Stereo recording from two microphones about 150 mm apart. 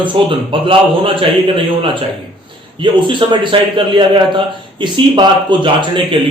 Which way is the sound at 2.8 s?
35° right (ahead or behind).